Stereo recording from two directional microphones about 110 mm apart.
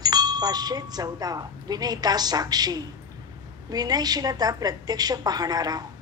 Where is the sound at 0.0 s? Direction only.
35° right (ahead or behind).